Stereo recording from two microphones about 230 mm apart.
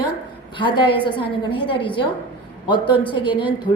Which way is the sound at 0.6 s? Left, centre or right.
Left.